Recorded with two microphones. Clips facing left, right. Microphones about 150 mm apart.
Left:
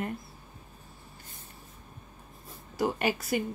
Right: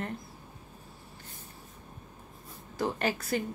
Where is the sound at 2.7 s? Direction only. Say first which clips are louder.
Left 2 dB; 10° left (ahead or behind).